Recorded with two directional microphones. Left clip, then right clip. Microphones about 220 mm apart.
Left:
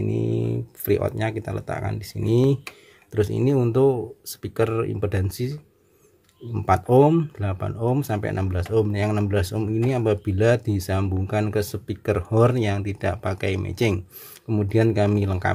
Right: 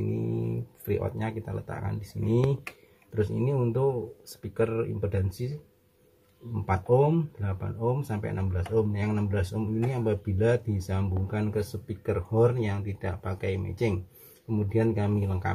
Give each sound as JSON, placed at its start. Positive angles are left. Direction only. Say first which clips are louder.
{"t": 0.8, "sound": "speech", "louder": "left 8 dB", "side_deg": 45}
{"t": 6.6, "sound": "speech", "louder": "left 7 dB", "side_deg": 50}